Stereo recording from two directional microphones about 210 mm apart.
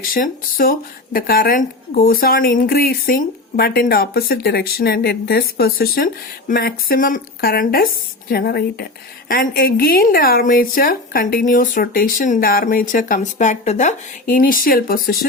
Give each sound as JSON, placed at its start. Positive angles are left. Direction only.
{"t": 0.1, "sound": "speech", "side_deg": 40}